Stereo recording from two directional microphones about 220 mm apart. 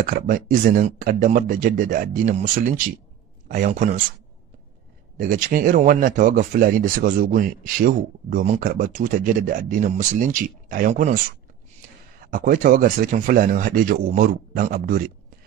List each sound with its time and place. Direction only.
0.0 s speech: 40° right (ahead or behind)
5.1 s speech: 40° right (ahead or behind)
12.3 s speech: 40° right (ahead or behind)